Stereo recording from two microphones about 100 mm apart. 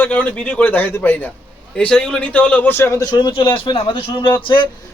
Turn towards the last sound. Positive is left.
turn(degrees=55)  # may be behind; listen again after turning